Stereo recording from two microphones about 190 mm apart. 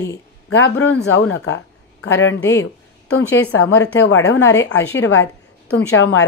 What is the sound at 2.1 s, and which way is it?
Speech, 75° left (ahead or behind).